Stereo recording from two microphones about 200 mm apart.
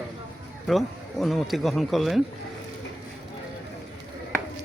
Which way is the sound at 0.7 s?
Centre (ahead or behind).